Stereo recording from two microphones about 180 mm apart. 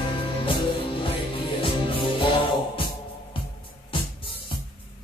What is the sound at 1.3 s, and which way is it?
Music, 30° left (ahead or behind).